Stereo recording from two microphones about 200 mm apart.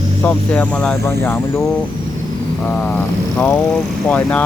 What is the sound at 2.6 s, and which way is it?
Speech, 10° left (ahead or behind).